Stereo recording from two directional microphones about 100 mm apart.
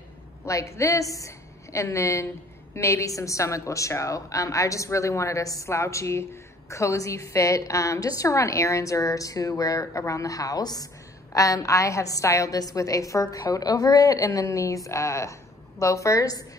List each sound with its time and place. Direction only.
0.5 s a woman's voice: 30° left (ahead or behind)